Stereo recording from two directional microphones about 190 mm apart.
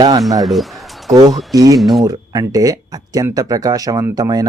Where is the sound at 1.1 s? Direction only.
20° right (ahead or behind).